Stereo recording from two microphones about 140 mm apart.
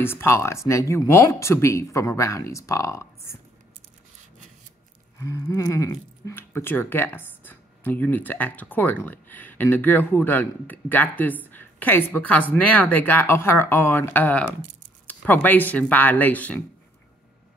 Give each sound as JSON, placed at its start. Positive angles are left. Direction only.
{"t": 0.0, "sound": "speech", "side_deg": 15}
{"t": 5.2, "sound": "speech", "side_deg": 20}